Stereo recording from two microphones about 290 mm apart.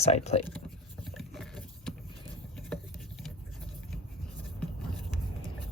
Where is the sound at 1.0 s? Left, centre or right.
Centre.